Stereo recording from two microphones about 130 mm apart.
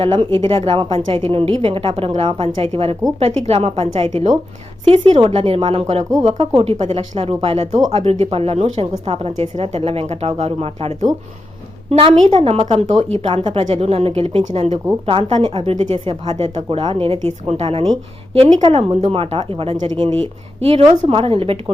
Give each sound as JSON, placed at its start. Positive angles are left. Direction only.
{"t": 0.0, "sound": "a woman's voice", "side_deg": -40}
{"t": 4.9, "sound": "a woman's voice", "side_deg": -45}
{"t": 13.2, "sound": "a woman's voice", "side_deg": -40}
{"t": 16.6, "sound": "a woman's voice", "side_deg": -40}